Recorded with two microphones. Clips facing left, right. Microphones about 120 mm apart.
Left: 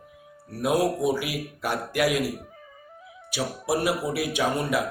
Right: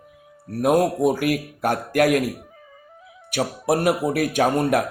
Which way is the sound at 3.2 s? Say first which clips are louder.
Right 6 dB; 55° right (ahead or behind).